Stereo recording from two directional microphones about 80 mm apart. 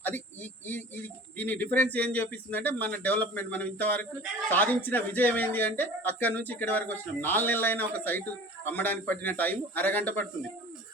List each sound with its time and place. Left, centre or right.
0.7 s speech: left